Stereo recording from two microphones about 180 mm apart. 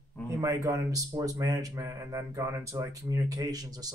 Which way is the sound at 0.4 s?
15° right (ahead or behind).